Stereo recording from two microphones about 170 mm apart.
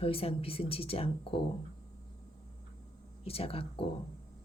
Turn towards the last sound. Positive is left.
turn(degrees=35)  # may be behind; listen again after turning